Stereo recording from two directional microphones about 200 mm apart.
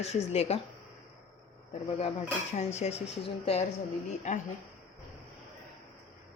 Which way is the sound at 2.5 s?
35° left (ahead or behind).